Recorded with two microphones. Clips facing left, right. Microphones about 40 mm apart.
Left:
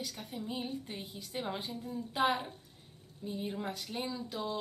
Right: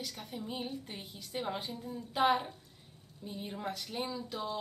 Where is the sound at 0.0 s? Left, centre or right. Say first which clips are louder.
Left 1 dB; centre.